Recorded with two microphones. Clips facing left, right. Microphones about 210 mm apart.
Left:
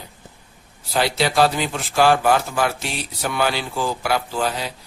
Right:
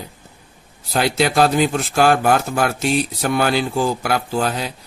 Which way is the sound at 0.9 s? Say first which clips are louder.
Right 2 dB; 50° right (ahead or behind).